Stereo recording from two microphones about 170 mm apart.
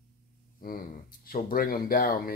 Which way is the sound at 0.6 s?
55° left (ahead or behind).